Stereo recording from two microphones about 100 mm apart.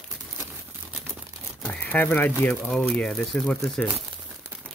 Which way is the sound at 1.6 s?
20° left (ahead or behind).